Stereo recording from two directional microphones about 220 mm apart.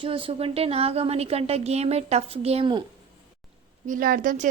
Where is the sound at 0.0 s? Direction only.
25° right (ahead or behind).